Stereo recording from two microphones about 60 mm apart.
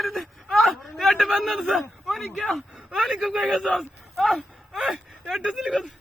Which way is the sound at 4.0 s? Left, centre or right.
Centre.